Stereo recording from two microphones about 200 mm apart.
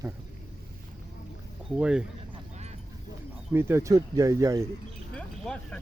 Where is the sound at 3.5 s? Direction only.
10° right (ahead or behind).